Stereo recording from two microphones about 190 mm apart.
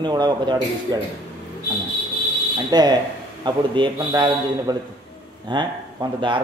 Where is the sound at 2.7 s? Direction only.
20° right (ahead or behind).